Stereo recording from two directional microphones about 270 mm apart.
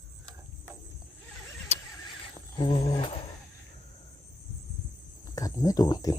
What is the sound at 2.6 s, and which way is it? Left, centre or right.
Roaring cats, centre.